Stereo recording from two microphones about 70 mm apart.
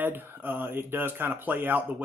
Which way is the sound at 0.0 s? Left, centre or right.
Right.